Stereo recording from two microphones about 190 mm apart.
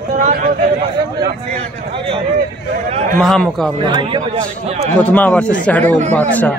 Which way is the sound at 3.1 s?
Centre (ahead or behind).